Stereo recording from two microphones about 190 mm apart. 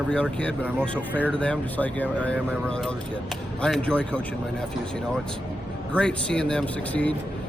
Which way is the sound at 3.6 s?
5° left (ahead or behind).